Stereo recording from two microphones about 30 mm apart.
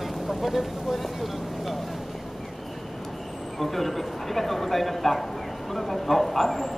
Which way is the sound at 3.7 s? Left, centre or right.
Centre.